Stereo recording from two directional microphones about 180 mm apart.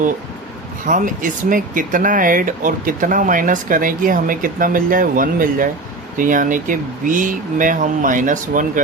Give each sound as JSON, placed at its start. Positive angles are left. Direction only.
{"t": 0.9, "sound": "speech", "side_deg": -45}